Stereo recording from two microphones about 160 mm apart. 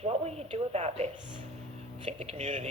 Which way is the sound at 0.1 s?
40° right (ahead or behind).